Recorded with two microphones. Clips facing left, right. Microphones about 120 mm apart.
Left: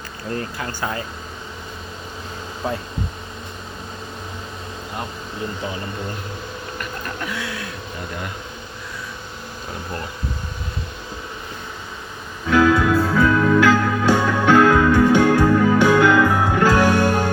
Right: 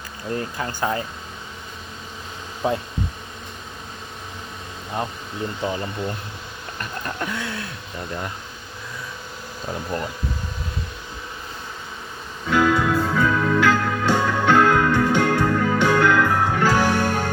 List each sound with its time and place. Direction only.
0.3 s speech: 20° right (ahead or behind)
2.6 s speech: 20° right (ahead or behind)
7.2 s speech: 30° right (ahead or behind)
12.5 s music: centre (ahead or behind)